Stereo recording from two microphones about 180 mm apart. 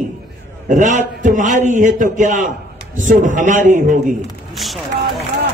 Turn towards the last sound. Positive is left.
turn(degrees=0)  # may be behind; listen again after turning